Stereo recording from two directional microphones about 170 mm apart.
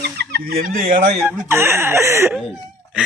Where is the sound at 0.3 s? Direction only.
65° right (ahead or behind).